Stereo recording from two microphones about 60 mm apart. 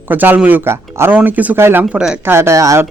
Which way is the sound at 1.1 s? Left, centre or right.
Right.